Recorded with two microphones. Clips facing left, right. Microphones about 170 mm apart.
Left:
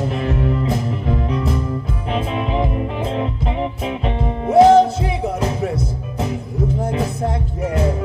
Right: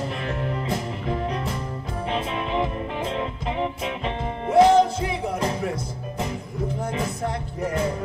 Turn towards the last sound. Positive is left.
turn(degrees=35)  # may be behind; listen again after turning